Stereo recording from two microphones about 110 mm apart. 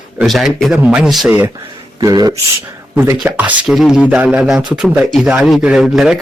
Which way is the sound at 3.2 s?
15° right (ahead or behind).